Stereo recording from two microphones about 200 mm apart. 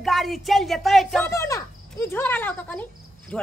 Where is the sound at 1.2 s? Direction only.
15° left (ahead or behind).